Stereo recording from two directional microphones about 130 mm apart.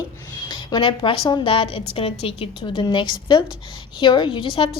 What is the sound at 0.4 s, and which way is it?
A woman's voice, 35° left (ahead or behind).